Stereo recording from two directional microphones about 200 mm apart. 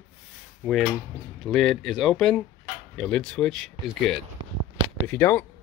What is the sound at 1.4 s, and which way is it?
Speech, centre (ahead or behind).